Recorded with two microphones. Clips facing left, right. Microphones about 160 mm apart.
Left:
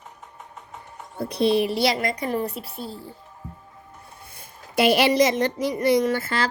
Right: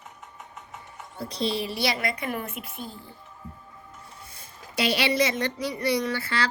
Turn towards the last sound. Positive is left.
turn(degrees=45)  # may be behind; listen again after turning